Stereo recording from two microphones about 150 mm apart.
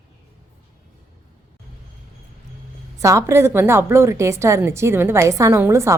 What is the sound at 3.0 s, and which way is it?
A woman's voice, 20° right (ahead or behind).